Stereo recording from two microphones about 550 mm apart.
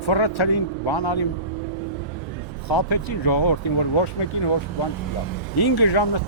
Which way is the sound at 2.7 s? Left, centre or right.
Left.